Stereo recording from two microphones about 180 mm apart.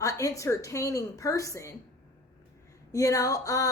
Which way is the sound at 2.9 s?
20° left (ahead or behind).